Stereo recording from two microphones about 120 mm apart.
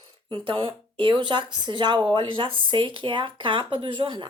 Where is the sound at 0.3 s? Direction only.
45° right (ahead or behind).